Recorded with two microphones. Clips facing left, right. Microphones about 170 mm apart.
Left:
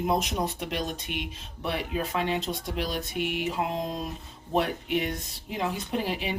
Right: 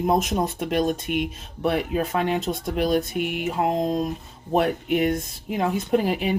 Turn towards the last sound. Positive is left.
turn(degrees=-50)  # may be behind; listen again after turning